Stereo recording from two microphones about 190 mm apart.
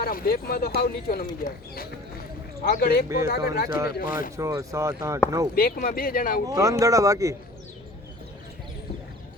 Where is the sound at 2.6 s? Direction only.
50° left (ahead or behind).